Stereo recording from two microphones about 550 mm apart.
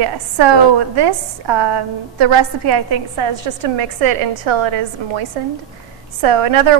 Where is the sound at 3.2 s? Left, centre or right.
Right.